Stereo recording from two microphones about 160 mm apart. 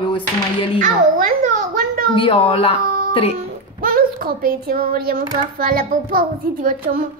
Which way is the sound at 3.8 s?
65° right (ahead or behind).